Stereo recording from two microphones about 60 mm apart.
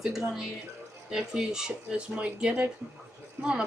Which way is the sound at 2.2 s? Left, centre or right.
Centre.